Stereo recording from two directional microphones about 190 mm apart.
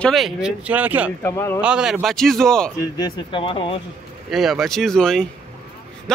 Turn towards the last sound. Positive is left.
turn(degrees=5)  # may be behind; listen again after turning